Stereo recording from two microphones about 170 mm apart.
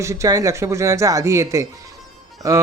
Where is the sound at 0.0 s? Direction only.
20° right (ahead or behind).